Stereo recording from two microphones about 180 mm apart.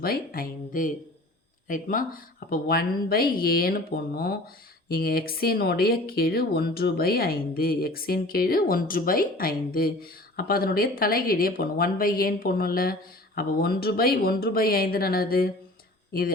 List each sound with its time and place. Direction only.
0.0 s speech: 55° left (ahead or behind)